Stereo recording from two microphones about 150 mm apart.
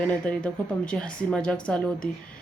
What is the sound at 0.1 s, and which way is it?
A woman's voice, 5° left (ahead or behind).